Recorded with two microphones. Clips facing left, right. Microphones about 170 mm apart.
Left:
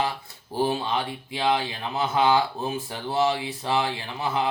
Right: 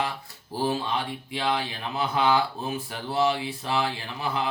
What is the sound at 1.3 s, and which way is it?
Speech, 20° left (ahead or behind).